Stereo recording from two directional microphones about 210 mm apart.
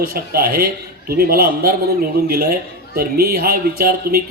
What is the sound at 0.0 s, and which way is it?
A man's voice, 45° right (ahead or behind).